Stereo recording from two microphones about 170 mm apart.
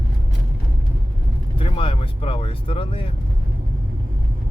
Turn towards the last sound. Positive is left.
turn(degrees=30)  # may be behind; listen again after turning